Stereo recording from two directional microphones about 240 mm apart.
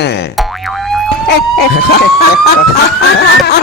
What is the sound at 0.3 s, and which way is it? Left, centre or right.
Boing, centre.